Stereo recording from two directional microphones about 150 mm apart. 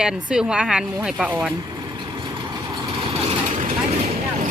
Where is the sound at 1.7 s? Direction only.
25° right (ahead or behind).